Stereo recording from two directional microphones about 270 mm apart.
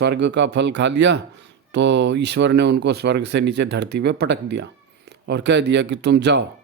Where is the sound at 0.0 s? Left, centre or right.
Right.